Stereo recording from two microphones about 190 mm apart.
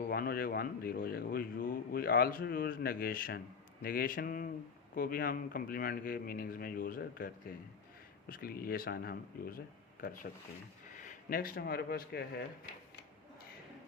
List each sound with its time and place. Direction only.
0.1 s a man's voice: 50° left (ahead or behind)
10.9 s speech: 40° left (ahead or behind)